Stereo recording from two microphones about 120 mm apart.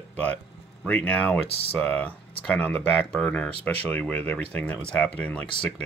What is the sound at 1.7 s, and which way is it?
Speech, 15° left (ahead or behind).